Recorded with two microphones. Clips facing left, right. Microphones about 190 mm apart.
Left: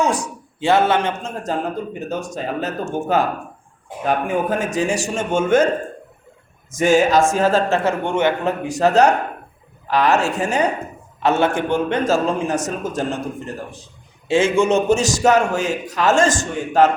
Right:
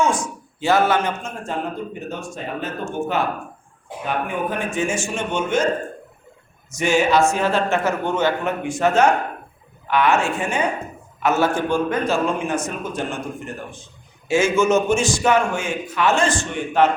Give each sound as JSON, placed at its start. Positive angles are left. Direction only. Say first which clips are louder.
{"t": 0.0, "sound": "a man's voice", "louder": "left 1 dB", "side_deg": 35}
{"t": 1.5, "sound": "a man's voice", "louder": "left 3 dB", "side_deg": 35}
{"t": 6.7, "sound": "a man's voice", "louder": "left 3 dB", "side_deg": 45}
{"t": 8.6, "sound": "a man's voice", "louder": "left 2 dB", "side_deg": 35}
{"t": 11.2, "sound": "a man's voice", "louder": "left 2 dB", "side_deg": 30}
{"t": 12.0, "sound": "a man's voice", "louder": "left 2 dB", "side_deg": 40}